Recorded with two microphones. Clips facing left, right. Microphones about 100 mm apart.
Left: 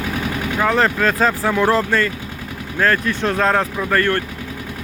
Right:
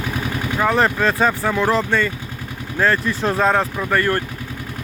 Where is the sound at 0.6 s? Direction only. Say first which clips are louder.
Even; 10° right (ahead or behind).